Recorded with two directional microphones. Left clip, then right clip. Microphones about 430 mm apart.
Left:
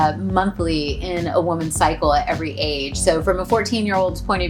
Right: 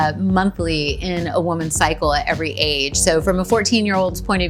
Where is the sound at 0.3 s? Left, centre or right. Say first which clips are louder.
Even; right.